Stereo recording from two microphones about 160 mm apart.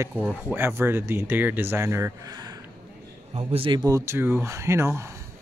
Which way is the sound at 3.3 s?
35° right (ahead or behind).